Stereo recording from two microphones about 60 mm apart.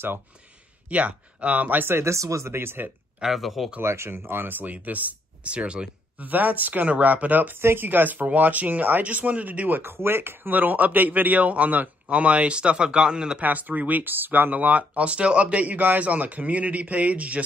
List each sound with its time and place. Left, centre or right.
0.8 s speech: right
2.0 s speech: right
3.2 s speech: centre
3.8 s speech: right; by 13.4 s centre
13.4 s speech: right